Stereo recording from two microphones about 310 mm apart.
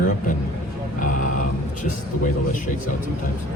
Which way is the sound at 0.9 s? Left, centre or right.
Left.